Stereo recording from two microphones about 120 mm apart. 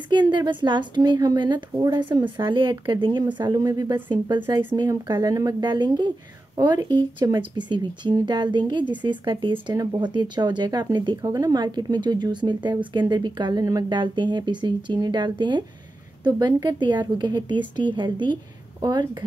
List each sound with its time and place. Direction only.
0.1 s speech: 40° right (ahead or behind)